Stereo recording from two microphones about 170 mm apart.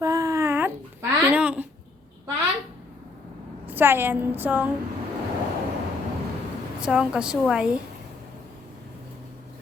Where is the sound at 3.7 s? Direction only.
10° right (ahead or behind).